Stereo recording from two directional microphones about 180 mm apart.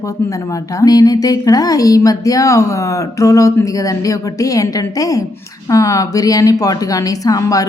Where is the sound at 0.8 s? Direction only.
20° left (ahead or behind).